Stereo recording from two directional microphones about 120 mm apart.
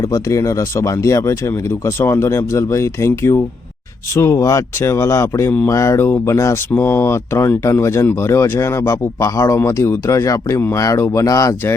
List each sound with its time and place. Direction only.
0.1 s speech: 25° left (ahead or behind)